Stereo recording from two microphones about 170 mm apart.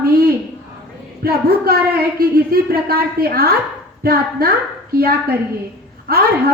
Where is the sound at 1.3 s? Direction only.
65° right (ahead or behind).